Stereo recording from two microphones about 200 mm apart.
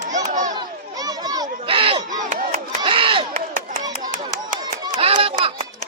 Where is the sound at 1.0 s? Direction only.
20° right (ahead or behind).